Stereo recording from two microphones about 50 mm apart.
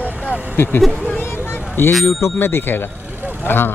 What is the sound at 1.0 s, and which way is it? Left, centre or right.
Vehicle, left.